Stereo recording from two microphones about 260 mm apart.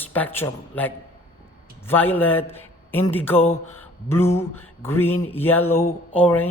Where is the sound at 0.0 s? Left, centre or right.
Centre.